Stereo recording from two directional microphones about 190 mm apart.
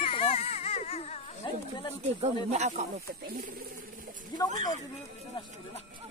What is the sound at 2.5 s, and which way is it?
Speech, 35° right (ahead or behind).